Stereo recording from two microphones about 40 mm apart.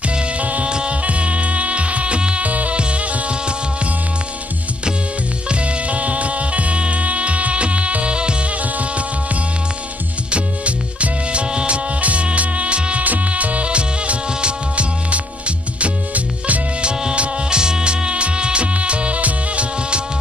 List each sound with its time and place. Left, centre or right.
0.4 s music: right
0.7 s music: right
5.5 s music: right
8.7 s music: right
13.0 s music: right
16.8 s music: right